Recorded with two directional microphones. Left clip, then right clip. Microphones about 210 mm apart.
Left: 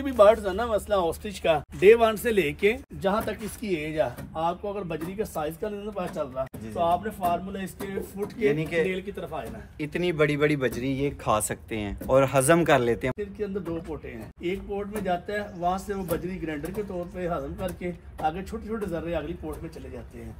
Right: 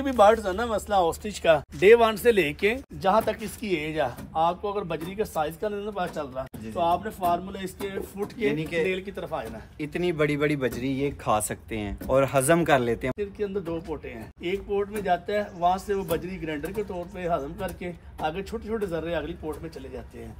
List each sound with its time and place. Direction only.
0.0 s speech: 30° right (ahead or behind)
3.1 s speech: 30° right (ahead or behind); by 8.8 s 5° left (ahead or behind)
8.8 s speech: 30° right (ahead or behind)
9.8 s speech: centre (ahead or behind)
14.4 s speech: 15° right (ahead or behind)